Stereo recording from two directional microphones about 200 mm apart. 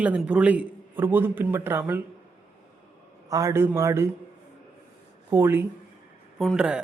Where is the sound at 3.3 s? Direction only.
15° right (ahead or behind).